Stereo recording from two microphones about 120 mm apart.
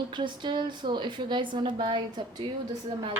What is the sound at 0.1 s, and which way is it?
A woman's voice, 40° right (ahead or behind).